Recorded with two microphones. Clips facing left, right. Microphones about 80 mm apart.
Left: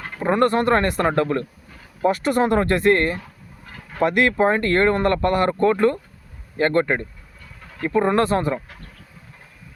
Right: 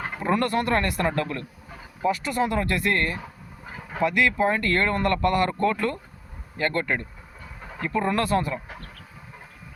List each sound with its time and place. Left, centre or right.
0.2 s speech: left
2.0 s speech: left
4.0 s speech: left
7.6 s a sound: right
7.9 s speech: left